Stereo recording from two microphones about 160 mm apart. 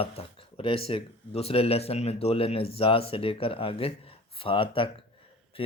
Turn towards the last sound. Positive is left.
turn(degrees=35)  # may be behind; listen again after turning